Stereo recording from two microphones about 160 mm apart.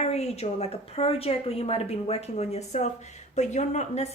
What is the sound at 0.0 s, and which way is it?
A woman's voice, 40° left (ahead or behind).